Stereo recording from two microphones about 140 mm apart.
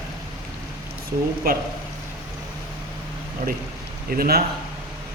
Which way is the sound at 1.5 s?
90° right.